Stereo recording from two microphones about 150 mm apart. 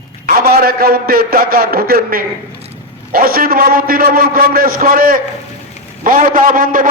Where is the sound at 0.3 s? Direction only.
85° right.